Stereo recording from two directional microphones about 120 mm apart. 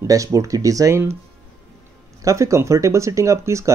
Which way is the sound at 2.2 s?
25° right (ahead or behind).